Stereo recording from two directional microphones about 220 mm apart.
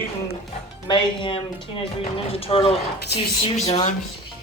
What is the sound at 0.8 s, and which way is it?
Speech, 20° left (ahead or behind).